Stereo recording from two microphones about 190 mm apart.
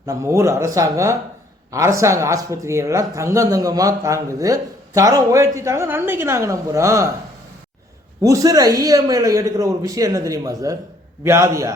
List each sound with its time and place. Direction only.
0.0 s speech: 15° right (ahead or behind)
8.2 s speech: 15° right (ahead or behind)